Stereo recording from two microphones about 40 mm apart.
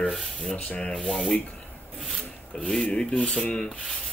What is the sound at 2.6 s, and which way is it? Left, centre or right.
Speech, left.